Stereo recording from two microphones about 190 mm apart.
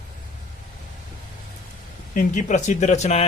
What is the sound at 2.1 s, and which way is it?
A man's voice, 40° left (ahead or behind).